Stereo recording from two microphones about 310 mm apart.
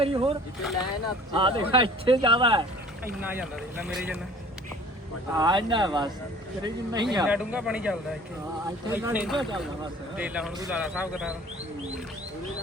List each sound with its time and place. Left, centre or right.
0.0 s speech: centre
3.2 s speech: centre
5.4 s speech: centre
7.3 s speech: centre